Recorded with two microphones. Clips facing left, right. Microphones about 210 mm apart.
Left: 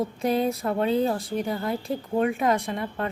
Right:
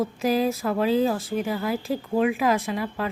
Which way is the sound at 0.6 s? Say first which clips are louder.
Right 1 dB; 30° left (ahead or behind).